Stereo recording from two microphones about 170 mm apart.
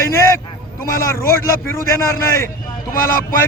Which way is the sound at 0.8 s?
15° left (ahead or behind).